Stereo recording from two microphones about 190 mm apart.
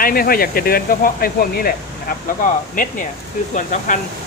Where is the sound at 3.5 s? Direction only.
40° left (ahead or behind).